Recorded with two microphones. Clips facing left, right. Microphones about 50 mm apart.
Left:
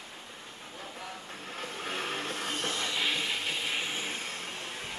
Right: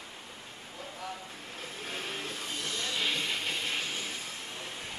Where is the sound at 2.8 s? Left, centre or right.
Centre.